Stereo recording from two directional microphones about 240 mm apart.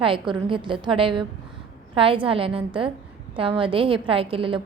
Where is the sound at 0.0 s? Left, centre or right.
Right.